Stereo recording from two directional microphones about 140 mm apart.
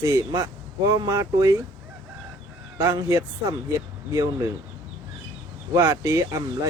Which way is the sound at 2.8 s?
20° right (ahead or behind).